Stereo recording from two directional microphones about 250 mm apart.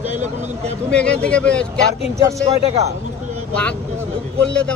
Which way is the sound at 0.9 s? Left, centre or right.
Centre.